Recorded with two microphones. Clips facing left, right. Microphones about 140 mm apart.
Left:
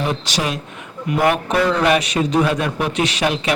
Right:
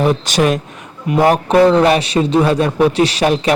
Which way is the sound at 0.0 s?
50° right (ahead or behind).